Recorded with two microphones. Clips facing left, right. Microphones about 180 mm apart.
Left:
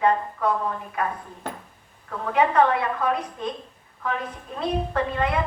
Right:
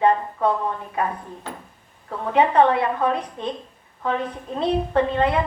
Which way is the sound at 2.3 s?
30° right (ahead or behind).